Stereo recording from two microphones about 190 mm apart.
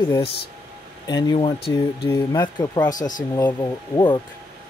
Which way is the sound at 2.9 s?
45° left (ahead or behind).